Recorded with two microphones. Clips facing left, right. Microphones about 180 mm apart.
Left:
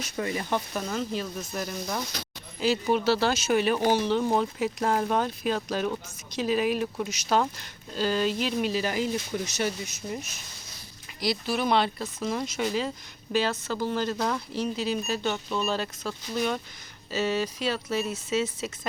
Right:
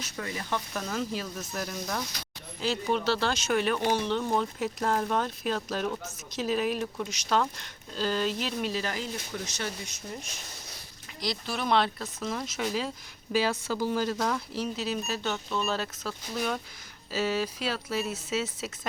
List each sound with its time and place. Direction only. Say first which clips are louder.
0.2 s speech: left 5 dB; 25° left (ahead or behind)
0.7 s speech: left 3 dB; 10° left (ahead or behind)
0.9 s speech: left 1 dB; 5° right (ahead or behind)